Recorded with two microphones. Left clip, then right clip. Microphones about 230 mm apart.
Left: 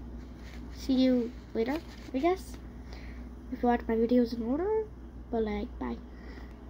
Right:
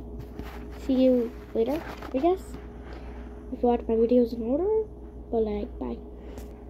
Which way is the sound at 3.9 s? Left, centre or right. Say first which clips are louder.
Right 5 dB; centre.